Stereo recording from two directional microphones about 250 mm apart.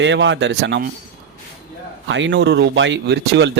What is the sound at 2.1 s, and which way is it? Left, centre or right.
Speech, right.